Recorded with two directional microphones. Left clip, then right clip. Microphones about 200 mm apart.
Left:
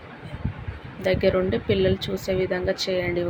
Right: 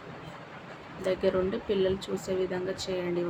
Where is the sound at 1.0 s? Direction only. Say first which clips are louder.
Left 6 dB; 20° left (ahead or behind).